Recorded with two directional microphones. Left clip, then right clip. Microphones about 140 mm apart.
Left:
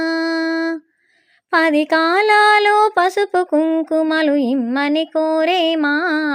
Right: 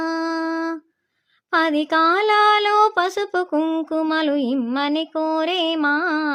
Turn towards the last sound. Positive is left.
turn(degrees=25)  # may be behind; listen again after turning